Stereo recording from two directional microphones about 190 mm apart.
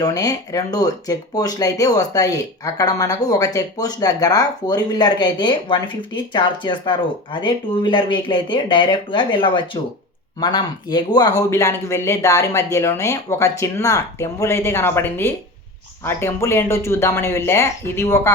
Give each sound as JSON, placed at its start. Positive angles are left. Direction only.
{"t": 0.0, "sound": "speech", "side_deg": 20}